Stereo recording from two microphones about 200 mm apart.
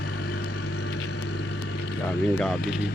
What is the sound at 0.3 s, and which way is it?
Vehicle, 90° left.